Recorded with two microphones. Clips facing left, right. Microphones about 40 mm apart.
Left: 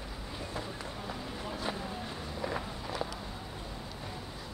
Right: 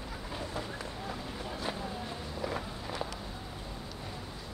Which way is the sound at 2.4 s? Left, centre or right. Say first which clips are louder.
Left 1 dB; centre.